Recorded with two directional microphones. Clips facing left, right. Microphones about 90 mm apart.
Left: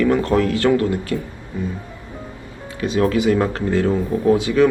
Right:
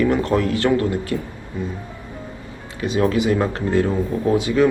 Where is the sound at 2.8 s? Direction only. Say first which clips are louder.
Left 1 dB; 25° right (ahead or behind).